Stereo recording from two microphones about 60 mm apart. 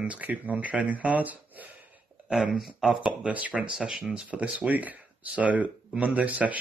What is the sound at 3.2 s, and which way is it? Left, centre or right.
Speech, right.